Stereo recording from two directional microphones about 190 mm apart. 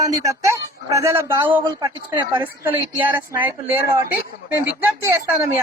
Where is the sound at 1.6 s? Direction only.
20° right (ahead or behind).